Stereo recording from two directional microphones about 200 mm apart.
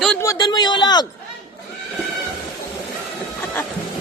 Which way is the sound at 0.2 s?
20° left (ahead or behind).